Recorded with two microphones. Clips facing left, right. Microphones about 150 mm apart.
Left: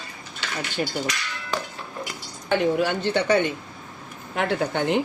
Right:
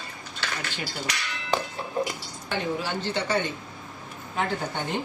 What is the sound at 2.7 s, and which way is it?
Speech, 60° left (ahead or behind).